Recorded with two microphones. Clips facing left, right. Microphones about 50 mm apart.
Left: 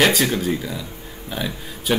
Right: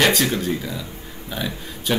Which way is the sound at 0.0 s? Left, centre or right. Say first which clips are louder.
Left 1 dB; centre.